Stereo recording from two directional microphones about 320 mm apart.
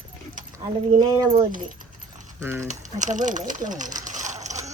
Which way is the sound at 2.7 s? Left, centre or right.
Right.